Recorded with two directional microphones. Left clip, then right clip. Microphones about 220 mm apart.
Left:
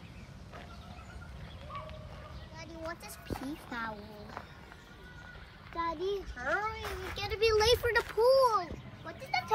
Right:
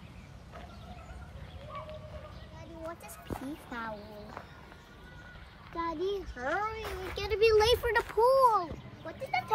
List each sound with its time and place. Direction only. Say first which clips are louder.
3.3 s speech: left 1 dB; 15° right (ahead or behind)
5.8 s speech: right 1 dB; 45° right (ahead or behind)
8.0 s a child's voice: right 2 dB; 25° right (ahead or behind)
9.0 s speech: right 1 dB; 40° right (ahead or behind)